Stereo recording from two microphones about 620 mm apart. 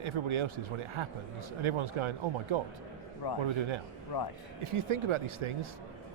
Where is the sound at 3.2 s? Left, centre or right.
Left.